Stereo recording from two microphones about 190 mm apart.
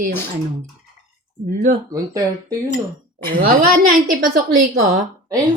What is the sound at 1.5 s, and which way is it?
Speech, 45° right (ahead or behind).